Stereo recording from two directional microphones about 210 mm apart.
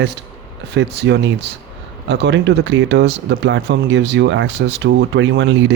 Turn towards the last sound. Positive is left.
turn(degrees=-60)  # may be behind; listen again after turning